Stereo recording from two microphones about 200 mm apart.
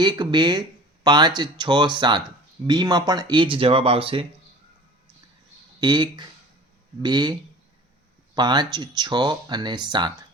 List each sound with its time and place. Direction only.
0.0 s speech: 20° right (ahead or behind)
5.8 s speech: 20° right (ahead or behind)
8.4 s speech: 20° right (ahead or behind)